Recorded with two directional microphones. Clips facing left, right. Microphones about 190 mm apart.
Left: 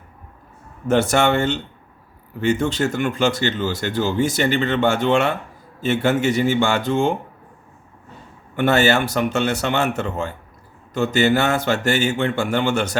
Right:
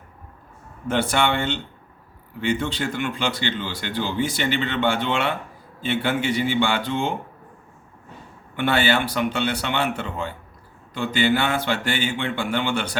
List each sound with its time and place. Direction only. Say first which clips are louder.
0.9 s speech: left 5 dB; 45° left (ahead or behind)
8.5 s speech: left 4 dB; 45° left (ahead or behind)